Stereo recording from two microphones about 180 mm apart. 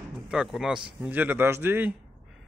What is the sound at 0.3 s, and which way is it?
Speech, centre (ahead or behind).